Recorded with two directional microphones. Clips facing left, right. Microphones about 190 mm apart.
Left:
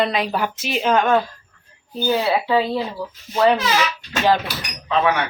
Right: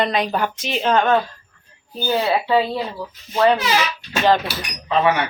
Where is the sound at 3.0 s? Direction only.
10° left (ahead or behind).